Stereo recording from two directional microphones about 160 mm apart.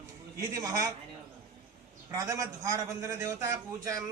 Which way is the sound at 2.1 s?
20° right (ahead or behind).